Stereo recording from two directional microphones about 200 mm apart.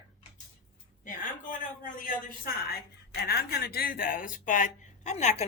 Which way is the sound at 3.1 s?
50° left (ahead or behind).